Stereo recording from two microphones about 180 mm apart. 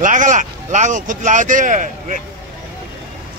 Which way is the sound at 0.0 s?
45° right (ahead or behind).